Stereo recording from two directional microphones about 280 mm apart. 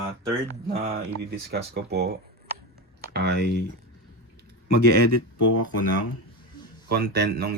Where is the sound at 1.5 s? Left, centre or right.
Right.